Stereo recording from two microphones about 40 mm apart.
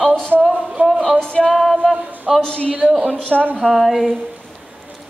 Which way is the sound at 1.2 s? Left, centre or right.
Left.